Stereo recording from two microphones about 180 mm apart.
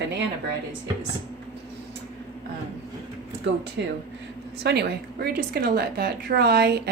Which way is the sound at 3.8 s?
75° right (ahead or behind).